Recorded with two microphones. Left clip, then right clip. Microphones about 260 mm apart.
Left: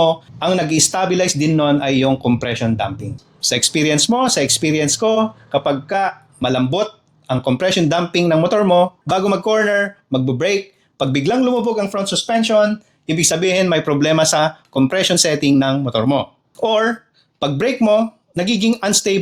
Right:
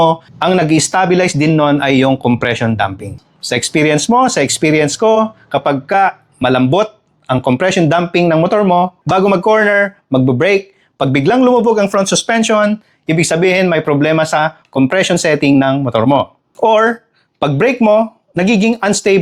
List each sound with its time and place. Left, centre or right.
0.3 s speech: right